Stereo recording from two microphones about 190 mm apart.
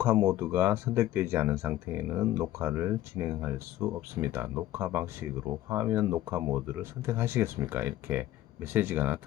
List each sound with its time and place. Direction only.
0.0 s speech: 15° right (ahead or behind)